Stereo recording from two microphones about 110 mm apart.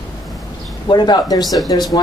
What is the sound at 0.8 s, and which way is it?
Speech, 40° left (ahead or behind).